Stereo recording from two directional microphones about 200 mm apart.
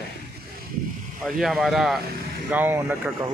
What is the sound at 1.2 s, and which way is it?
Speech, centre (ahead or behind).